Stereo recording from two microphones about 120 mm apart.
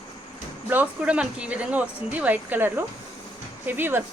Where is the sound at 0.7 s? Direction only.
10° right (ahead or behind).